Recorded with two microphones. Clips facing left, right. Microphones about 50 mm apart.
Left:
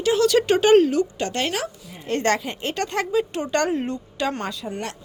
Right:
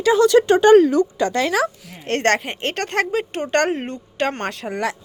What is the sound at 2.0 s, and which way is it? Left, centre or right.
A woman's voice, right.